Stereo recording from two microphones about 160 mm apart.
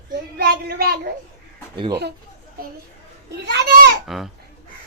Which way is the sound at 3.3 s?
90° right.